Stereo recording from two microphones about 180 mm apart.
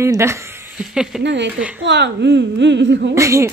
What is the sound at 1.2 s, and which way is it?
Speech, 75° right (ahead or behind).